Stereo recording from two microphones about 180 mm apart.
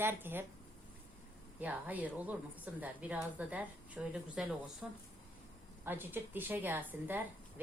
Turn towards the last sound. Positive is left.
turn(degrees=-10)  # may be behind; listen again after turning